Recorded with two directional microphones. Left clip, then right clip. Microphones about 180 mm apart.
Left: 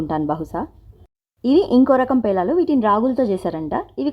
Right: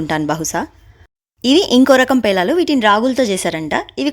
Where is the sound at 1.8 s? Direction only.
45° right (ahead or behind).